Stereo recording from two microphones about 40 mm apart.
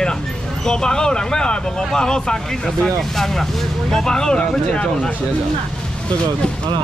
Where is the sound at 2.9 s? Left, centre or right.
Centre.